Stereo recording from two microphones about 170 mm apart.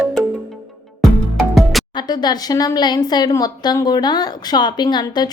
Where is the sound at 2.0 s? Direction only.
25° left (ahead or behind).